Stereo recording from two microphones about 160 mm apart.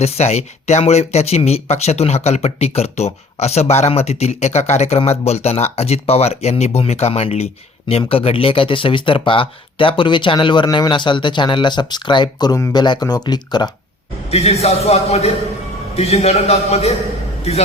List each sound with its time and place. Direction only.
0.0 s speech: 40° left (ahead or behind); by 13.7 s 25° left (ahead or behind)
14.3 s speech: 40° left (ahead or behind)